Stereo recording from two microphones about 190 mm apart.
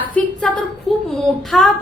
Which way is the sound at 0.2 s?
5° left (ahead or behind).